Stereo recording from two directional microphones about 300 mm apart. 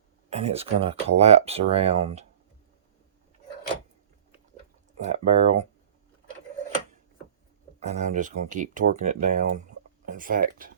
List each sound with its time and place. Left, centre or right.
0.3 s speech: centre
4.9 s speech: right
7.9 s speech: right